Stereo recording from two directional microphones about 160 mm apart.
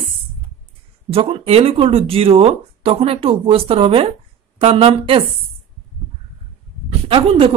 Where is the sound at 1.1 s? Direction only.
35° right (ahead or behind).